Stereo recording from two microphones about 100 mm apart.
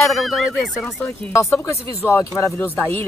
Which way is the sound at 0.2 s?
Centre (ahead or behind).